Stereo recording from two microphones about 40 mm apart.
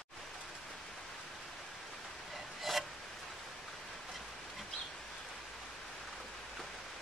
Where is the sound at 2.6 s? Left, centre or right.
Centre.